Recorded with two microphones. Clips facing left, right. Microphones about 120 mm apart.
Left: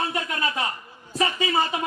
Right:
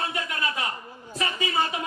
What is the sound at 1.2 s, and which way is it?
Speech, 30° left (ahead or behind).